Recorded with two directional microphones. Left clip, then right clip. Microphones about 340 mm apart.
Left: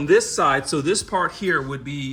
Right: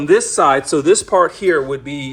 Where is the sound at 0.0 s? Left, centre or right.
Centre.